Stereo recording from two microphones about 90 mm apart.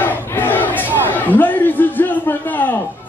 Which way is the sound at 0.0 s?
20° left (ahead or behind).